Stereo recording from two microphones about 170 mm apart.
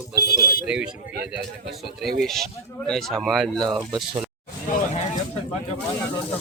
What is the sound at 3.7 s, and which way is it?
Speech, 25° right (ahead or behind).